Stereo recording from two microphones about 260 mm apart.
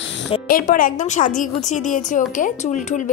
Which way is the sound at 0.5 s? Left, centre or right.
Left.